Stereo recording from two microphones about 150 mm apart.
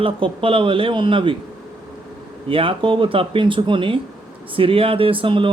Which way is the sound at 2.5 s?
35° right (ahead or behind).